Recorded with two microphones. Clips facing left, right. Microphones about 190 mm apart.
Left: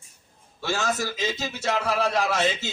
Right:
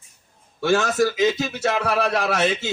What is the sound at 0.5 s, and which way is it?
A man's voice, 70° right (ahead or behind).